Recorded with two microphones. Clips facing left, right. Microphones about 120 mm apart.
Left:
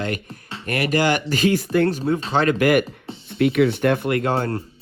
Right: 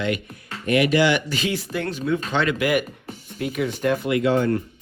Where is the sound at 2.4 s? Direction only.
45° left (ahead or behind).